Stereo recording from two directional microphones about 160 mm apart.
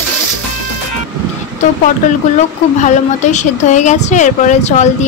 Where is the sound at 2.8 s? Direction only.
50° left (ahead or behind).